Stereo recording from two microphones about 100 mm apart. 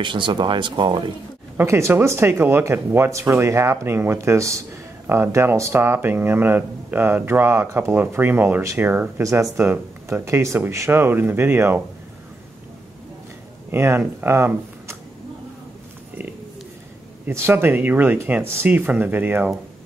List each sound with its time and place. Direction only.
0.0 s speech: 55° right (ahead or behind)
1.6 s speech: 30° right (ahead or behind)
13.7 s speech: 25° right (ahead or behind)
17.3 s speech: 25° right (ahead or behind)